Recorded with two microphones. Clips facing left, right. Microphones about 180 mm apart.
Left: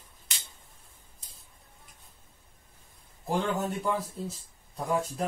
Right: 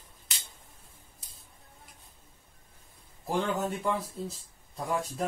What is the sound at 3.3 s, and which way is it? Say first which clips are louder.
Speech: even; centre (ahead or behind).